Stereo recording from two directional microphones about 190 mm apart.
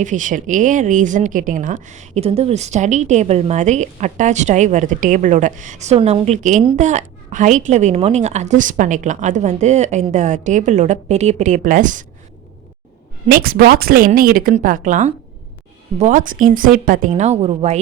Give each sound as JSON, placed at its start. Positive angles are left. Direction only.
{"t": 0.0, "sound": "speech", "side_deg": -40}
{"t": 13.3, "sound": "a woman's voice", "side_deg": -50}
{"t": 17.1, "sound": "speech", "side_deg": -35}